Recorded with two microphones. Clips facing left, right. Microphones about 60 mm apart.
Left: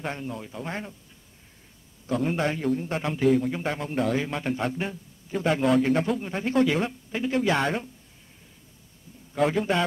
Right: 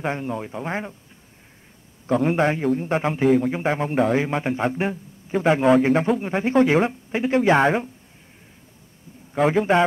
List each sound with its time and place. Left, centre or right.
0.0 s a man's voice: right
2.0 s a man's voice: right